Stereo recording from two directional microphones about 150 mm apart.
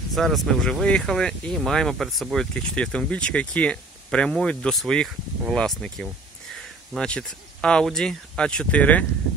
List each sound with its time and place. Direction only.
0.1 s speech: centre (ahead or behind)